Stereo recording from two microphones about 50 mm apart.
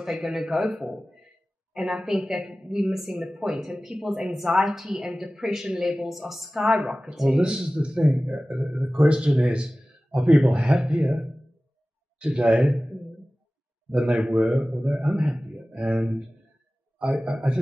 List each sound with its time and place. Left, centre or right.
0.0 s a woman's voice: centre
13.9 s a man's voice: centre